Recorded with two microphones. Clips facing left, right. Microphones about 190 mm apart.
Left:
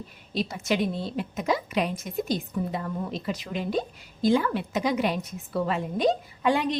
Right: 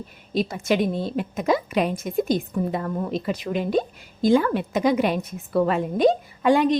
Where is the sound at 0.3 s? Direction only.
50° right (ahead or behind).